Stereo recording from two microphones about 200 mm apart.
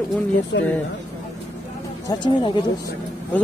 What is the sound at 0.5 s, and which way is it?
Speech, 60° left (ahead or behind).